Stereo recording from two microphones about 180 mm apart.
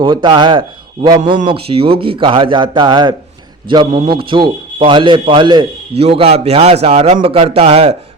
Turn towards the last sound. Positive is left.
turn(degrees=-35)  # may be behind; listen again after turning